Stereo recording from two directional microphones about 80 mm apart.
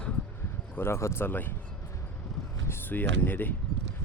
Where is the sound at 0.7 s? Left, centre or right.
Left.